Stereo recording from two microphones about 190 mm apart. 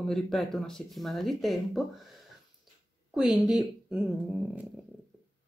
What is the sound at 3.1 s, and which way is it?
Speech, 5° right (ahead or behind).